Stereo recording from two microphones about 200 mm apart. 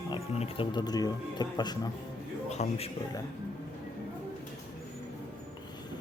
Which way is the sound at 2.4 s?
35° left (ahead or behind).